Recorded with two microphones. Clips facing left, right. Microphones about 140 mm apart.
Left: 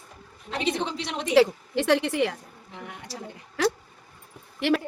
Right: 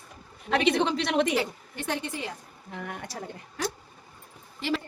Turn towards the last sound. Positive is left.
turn(degrees=65)  # may be behind; listen again after turning